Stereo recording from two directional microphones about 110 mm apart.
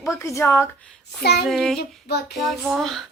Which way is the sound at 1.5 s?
Centre (ahead or behind).